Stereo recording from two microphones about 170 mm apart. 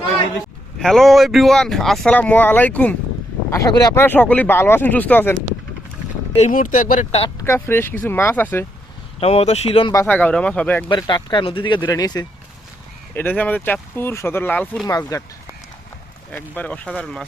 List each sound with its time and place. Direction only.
0.8 s speech: centre (ahead or behind)
3.5 s speech: 20° left (ahead or behind)
6.3 s speech: 45° left (ahead or behind)
7.4 s speech: 15° left (ahead or behind)
9.2 s speech: 35° left (ahead or behind)
9.9 s speech: 15° left (ahead or behind)
10.8 s speech: 25° left (ahead or behind)
13.1 s speech: 10° left (ahead or behind)
14.8 s speech: 20° left (ahead or behind)
16.3 s speech: 10° left (ahead or behind)